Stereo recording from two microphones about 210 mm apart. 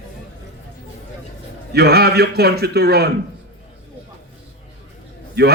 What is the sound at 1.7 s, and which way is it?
A man's voice, 50° right (ahead or behind).